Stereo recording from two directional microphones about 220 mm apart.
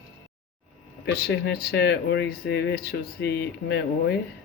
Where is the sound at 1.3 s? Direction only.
50° left (ahead or behind).